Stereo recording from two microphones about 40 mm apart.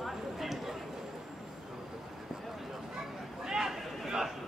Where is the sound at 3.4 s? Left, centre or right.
Centre.